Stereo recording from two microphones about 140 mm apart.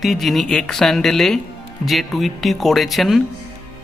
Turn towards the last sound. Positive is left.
turn(degrees=0)  # may be behind; listen again after turning